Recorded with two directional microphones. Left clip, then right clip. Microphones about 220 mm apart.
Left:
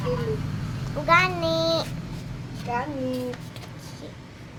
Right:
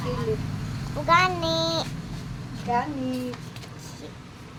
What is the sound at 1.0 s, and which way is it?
Speech, 5° right (ahead or behind).